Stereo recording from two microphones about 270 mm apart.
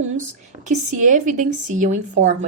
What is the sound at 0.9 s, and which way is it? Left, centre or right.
A woman's voice, right.